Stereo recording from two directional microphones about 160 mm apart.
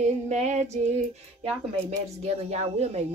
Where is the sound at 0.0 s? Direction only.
45° right (ahead or behind).